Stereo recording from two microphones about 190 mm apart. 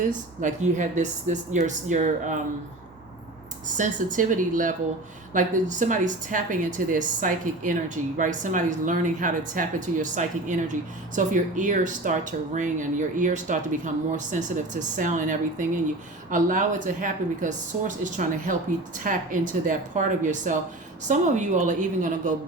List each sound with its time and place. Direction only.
0.4 s speech: 40° right (ahead or behind)
3.8 s a woman's voice: 40° right (ahead or behind)